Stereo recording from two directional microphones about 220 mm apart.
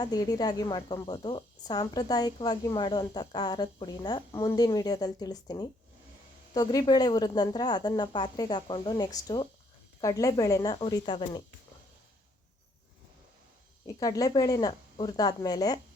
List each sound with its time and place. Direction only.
0.0 s speech: 15° left (ahead or behind)
13.8 s speech: 15° left (ahead or behind)